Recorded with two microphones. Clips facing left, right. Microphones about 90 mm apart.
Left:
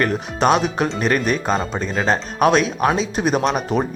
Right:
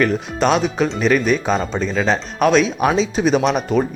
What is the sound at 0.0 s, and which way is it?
Speech, 5° left (ahead or behind).